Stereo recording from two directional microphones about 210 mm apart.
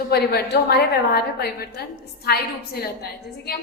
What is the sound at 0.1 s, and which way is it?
A woman's voice, 50° left (ahead or behind).